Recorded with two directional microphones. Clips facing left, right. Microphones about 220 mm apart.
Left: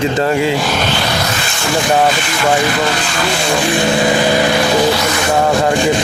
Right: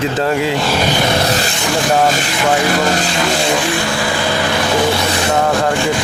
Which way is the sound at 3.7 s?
20° left (ahead or behind).